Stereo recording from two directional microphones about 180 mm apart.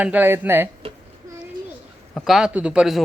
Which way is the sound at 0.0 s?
10° right (ahead or behind).